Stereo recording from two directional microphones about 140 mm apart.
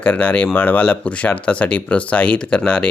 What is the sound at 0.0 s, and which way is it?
Speech, 10° left (ahead or behind).